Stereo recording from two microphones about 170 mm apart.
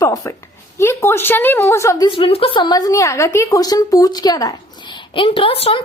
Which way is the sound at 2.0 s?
30° left (ahead or behind).